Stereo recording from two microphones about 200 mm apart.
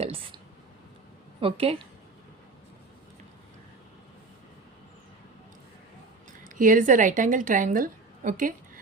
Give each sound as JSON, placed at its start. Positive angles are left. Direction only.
{"t": 0.0, "sound": "speech", "side_deg": -30}
{"t": 1.4, "sound": "a woman's voice", "side_deg": -30}
{"t": 6.4, "sound": "a woman's voice", "side_deg": -40}